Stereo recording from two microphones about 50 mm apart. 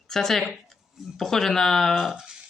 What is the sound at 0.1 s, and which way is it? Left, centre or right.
Speech, centre.